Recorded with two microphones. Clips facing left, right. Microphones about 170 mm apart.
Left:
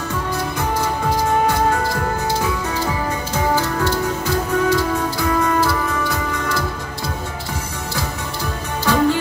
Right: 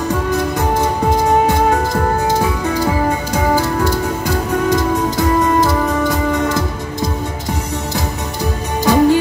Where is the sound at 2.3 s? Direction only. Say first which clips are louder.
Right 5 dB; 40° right (ahead or behind).